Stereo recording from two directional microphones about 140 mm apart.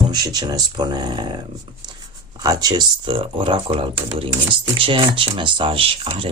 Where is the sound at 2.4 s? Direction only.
30° right (ahead or behind).